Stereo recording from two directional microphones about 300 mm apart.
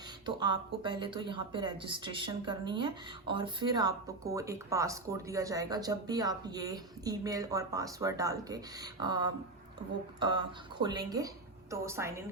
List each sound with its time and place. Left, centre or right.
0.3 s speech: centre